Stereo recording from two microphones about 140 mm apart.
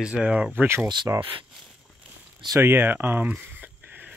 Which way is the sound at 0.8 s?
30° right (ahead or behind).